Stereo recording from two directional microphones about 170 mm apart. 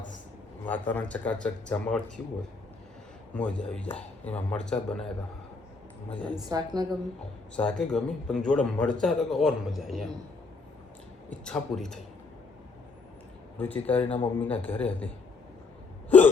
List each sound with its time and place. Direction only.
0.6 s speech: 10° left (ahead or behind)
3.3 s a man's voice: 5° left (ahead or behind)
6.1 s speech: 5° left (ahead or behind)
6.5 s a woman's voice: 25° right (ahead or behind)
7.5 s a man's voice: 5° left (ahead or behind)
11.3 s a man's voice: 5° left (ahead or behind)
13.6 s speech: 10° left (ahead or behind)
16.0 s hiccup: 10° left (ahead or behind)